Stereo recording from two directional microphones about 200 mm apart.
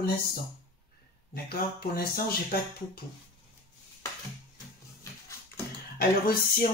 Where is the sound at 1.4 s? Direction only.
50° left (ahead or behind).